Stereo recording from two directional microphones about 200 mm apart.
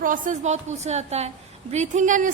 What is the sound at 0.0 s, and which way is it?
A woman's voice, 40° right (ahead or behind).